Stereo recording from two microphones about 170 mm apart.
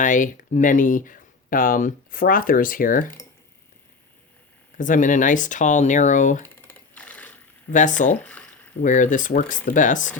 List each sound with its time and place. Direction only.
0.0 s speech: 50° left (ahead or behind)
4.8 s speech: 50° left (ahead or behind)
6.4 s typewriter: 10° left (ahead or behind)
7.7 s speech: 50° left (ahead or behind)
8.2 s a sound: 10° left (ahead or behind)
8.8 s speech: 50° left (ahead or behind)